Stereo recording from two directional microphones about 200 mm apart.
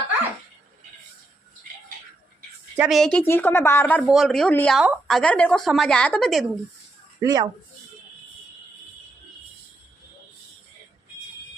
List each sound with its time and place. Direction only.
2.7 s a woman's voice: 5° right (ahead or behind)
7.2 s speech: 15° right (ahead or behind)